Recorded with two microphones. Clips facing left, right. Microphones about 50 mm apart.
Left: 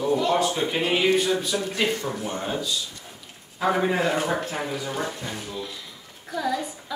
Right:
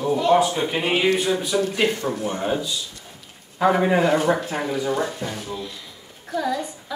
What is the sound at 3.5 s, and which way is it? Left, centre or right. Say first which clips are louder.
A woman's voice: right 4 dB; centre.